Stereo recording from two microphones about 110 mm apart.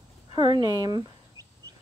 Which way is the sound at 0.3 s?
40° right (ahead or behind).